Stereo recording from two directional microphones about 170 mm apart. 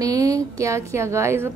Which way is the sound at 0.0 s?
20° right (ahead or behind).